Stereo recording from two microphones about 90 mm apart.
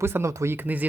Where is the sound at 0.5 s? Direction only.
20° right (ahead or behind).